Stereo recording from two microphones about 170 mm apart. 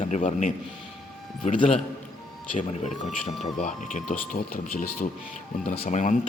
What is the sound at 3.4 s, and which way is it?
A man's voice, 45° left (ahead or behind).